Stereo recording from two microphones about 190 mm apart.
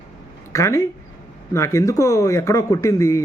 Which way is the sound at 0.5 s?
15° left (ahead or behind).